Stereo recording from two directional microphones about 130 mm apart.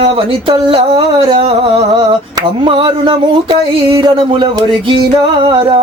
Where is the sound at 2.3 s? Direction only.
40° right (ahead or behind).